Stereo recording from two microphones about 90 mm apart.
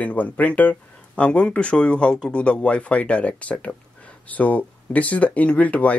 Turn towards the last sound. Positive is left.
turn(degrees=15)  # may be behind; listen again after turning